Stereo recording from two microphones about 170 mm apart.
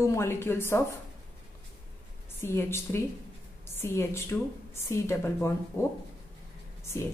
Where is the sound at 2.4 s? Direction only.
15° left (ahead or behind).